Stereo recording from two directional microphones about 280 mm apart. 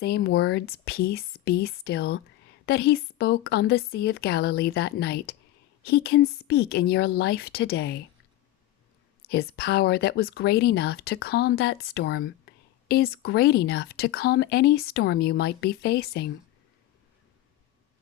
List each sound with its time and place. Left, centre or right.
0.0 s speech: left
9.2 s speech: left